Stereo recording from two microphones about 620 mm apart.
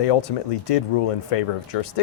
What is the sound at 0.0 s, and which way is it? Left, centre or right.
Speech, left.